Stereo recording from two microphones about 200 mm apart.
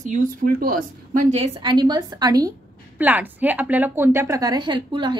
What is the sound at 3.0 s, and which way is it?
A woman's voice, 10° right (ahead or behind).